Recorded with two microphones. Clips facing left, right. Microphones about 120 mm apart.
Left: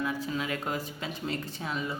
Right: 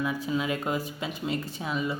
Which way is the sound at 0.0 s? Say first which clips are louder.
Right 3 dB; 20° right (ahead or behind).